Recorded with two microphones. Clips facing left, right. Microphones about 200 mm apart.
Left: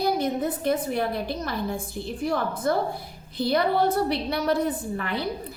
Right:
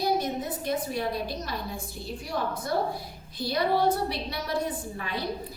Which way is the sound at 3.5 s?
60° left (ahead or behind).